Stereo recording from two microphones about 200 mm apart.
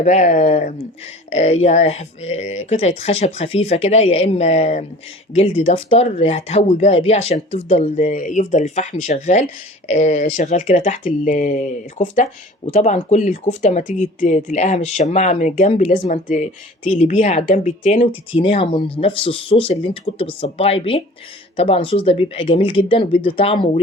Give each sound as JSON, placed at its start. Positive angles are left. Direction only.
{"t": 0.0, "sound": "speech", "side_deg": 35}
{"t": 18.0, "sound": "speech", "side_deg": 25}